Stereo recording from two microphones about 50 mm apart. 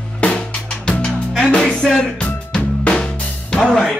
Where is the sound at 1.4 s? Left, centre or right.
Left.